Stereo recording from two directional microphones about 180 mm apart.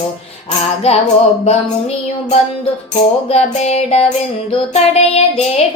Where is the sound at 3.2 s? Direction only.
35° left (ahead or behind).